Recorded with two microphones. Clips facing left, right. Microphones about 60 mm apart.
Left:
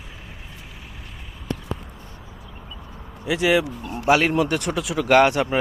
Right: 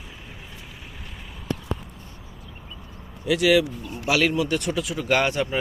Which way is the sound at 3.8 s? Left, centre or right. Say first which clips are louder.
Left 4 dB; left.